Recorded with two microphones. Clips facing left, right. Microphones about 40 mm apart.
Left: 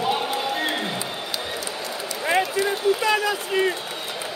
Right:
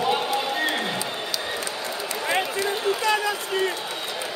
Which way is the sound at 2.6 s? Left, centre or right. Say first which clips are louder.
Left 2 dB; centre.